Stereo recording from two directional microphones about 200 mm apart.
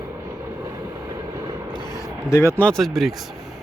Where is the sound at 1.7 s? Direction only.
20° left (ahead or behind); by 3.2 s centre (ahead or behind).